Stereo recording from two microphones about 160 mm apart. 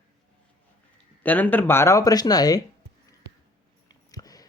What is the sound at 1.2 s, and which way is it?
Speech, 10° left (ahead or behind).